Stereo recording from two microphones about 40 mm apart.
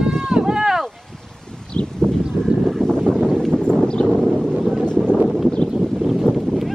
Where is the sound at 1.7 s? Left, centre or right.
Left.